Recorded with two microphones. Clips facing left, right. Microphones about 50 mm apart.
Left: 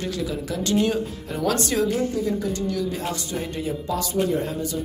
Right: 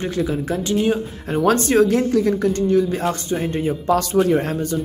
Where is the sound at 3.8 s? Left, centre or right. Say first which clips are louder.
Right 8 dB; right.